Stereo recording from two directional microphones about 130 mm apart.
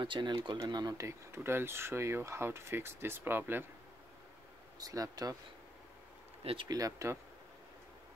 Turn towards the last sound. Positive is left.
turn(degrees=-25)  # may be behind; listen again after turning